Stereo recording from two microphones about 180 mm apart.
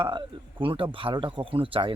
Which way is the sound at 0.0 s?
30° right (ahead or behind).